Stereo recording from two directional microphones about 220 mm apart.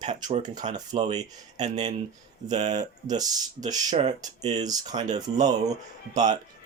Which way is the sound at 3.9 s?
30° right (ahead or behind).